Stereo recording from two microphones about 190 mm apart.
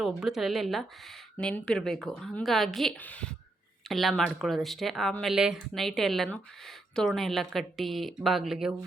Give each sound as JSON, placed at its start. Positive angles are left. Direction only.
{"t": 0.0, "sound": "speech", "side_deg": 0}